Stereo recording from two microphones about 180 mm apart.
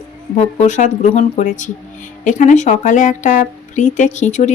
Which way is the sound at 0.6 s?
40° left (ahead or behind).